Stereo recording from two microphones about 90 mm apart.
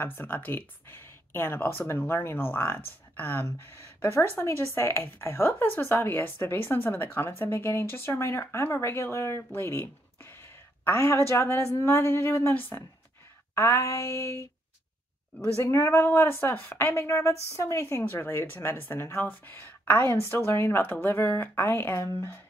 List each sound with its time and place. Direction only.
0.0 s speech: 20° left (ahead or behind)
13.6 s a sound: 30° left (ahead or behind)
15.6 s speech: 30° left (ahead or behind)